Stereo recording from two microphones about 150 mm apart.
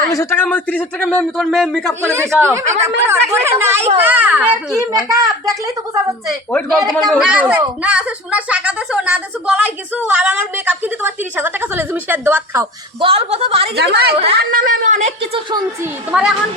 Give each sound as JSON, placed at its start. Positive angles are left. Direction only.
{"t": 0.1, "sound": "a man's voice", "side_deg": 15}
{"t": 1.4, "sound": "speech", "side_deg": 0}
{"t": 1.9, "sound": "a man's voice", "side_deg": 10}
{"t": 2.4, "sound": "speech", "side_deg": -20}
{"t": 5.0, "sound": "speech", "side_deg": -20}
{"t": 6.5, "sound": "a man's voice", "side_deg": 5}
{"t": 7.2, "sound": "speech", "side_deg": -5}
{"t": 13.0, "sound": "a woman's voice", "side_deg": -40}
{"t": 13.7, "sound": "a woman's voice", "side_deg": -90}
{"t": 14.3, "sound": "a woman's voice", "side_deg": -70}
{"t": 16.1, "sound": "speech", "side_deg": -5}